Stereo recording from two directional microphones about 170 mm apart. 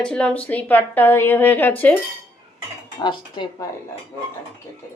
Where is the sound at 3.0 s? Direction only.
30° left (ahead or behind).